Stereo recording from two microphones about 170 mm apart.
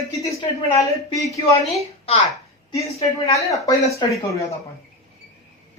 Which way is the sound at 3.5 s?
20° left (ahead or behind).